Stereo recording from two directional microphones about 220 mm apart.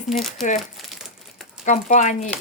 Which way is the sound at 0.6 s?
Centre (ahead or behind).